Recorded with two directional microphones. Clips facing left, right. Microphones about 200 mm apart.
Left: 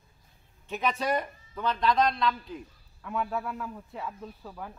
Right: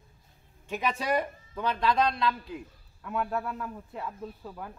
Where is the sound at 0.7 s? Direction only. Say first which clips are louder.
Even; 10° right (ahead or behind).